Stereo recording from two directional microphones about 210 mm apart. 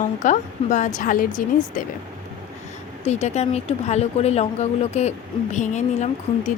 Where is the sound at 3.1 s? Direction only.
30° left (ahead or behind).